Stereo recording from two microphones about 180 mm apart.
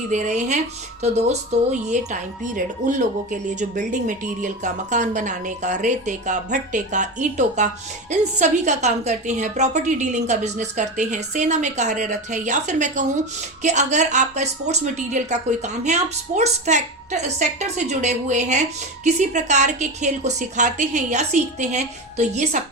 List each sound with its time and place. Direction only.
0.1 s a woman's voice: 40° right (ahead or behind)